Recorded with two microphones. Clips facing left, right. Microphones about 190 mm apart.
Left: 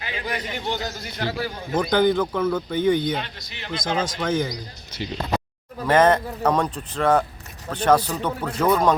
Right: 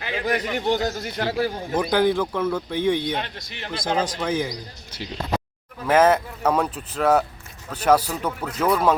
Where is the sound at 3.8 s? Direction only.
35° right (ahead or behind).